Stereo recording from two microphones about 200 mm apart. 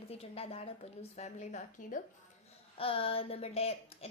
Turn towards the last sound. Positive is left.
turn(degrees=30)  # may be behind; listen again after turning